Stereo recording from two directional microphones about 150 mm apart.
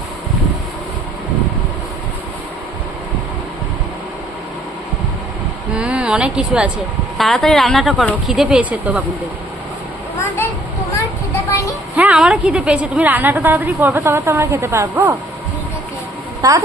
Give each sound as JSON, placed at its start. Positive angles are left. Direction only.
{"t": 5.7, "sound": "speech", "side_deg": -5}
{"t": 11.9, "sound": "a woman's voice", "side_deg": -5}
{"t": 16.4, "sound": "a woman's voice", "side_deg": -25}